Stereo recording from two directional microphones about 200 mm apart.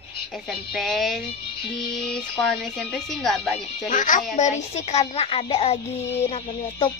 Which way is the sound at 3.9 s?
40° left (ahead or behind).